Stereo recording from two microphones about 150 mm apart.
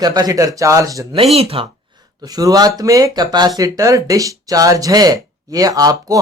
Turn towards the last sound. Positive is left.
turn(degrees=-25)  # may be behind; listen again after turning